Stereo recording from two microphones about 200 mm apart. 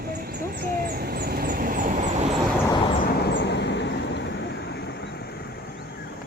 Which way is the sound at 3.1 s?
55° left (ahead or behind).